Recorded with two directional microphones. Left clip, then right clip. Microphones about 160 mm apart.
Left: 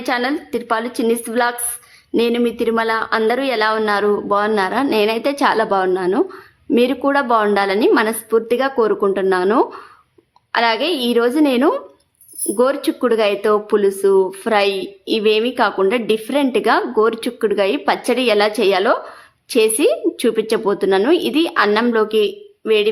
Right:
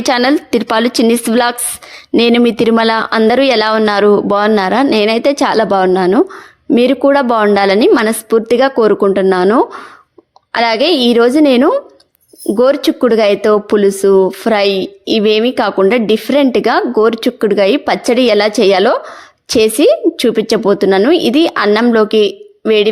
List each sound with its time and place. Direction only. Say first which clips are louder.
0.0 s speech: right 8 dB; 50° right (ahead or behind)